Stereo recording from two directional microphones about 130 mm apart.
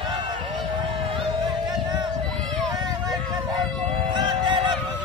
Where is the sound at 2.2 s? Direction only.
5° left (ahead or behind).